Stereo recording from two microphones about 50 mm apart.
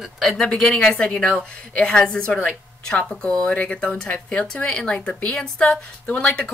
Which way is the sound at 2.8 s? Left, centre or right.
Centre.